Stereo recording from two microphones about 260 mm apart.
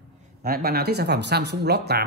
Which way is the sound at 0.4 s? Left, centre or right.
Right.